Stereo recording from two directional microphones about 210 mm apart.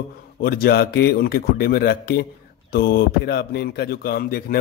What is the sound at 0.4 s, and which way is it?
Speech, 45° left (ahead or behind).